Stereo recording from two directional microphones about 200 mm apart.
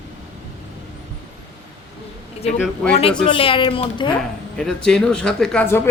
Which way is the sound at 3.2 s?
25° left (ahead or behind).